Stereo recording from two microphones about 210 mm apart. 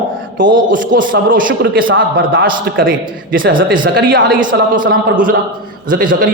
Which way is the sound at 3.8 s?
55° right (ahead or behind).